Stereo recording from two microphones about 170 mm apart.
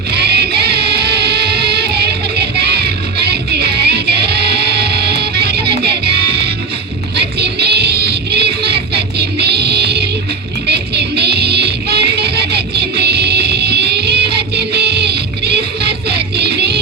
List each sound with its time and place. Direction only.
0.1 s music: 75° right (ahead or behind)